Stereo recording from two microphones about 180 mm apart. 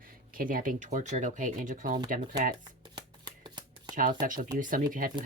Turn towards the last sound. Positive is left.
turn(degrees=-50)  # may be behind; listen again after turning